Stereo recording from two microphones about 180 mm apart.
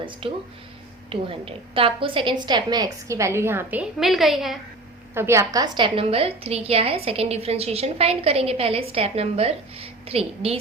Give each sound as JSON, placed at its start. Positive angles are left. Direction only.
{"t": 0.0, "sound": "a woman's voice", "side_deg": -30}
{"t": 5.1, "sound": "a woman's voice", "side_deg": -15}